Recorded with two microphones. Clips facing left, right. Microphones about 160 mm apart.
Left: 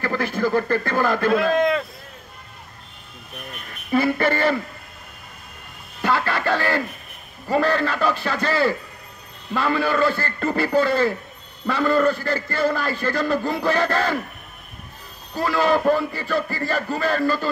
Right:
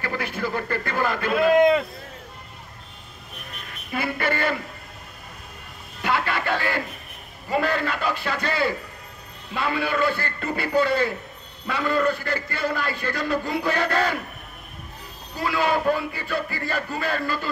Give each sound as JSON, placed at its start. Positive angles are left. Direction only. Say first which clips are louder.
{"t": 0.0, "sound": "speech", "louder": "left 5 dB", "side_deg": 40}
{"t": 3.9, "sound": "a man's voice", "louder": "left 6 dB", "side_deg": 45}
{"t": 6.0, "sound": "a man's voice", "louder": "left 3 dB", "side_deg": 45}
{"t": 15.3, "sound": "a man's voice", "louder": "left 4 dB", "side_deg": 45}